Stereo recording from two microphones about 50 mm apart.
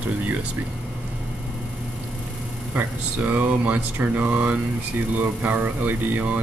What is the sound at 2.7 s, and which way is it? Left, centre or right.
Speech, right.